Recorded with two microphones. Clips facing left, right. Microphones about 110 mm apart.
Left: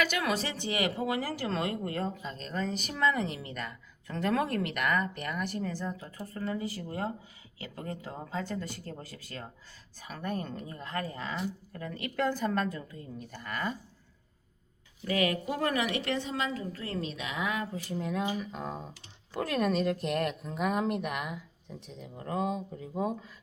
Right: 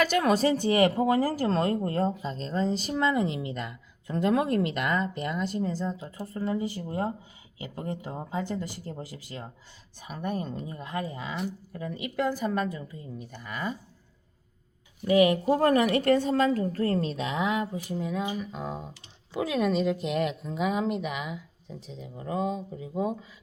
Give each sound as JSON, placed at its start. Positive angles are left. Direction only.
{"t": 0.0, "sound": "a woman's voice", "side_deg": -40}
{"t": 15.0, "sound": "speech", "side_deg": -20}
{"t": 15.4, "sound": "speech", "side_deg": -35}
{"t": 17.8, "sound": "speech", "side_deg": -5}